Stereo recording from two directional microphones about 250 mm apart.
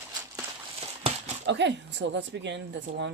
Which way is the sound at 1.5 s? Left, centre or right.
Right.